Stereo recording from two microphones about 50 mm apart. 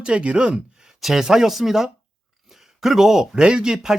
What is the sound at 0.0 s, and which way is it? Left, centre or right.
Speech, right.